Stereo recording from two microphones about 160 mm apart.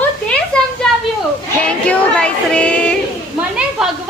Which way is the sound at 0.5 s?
5° left (ahead or behind).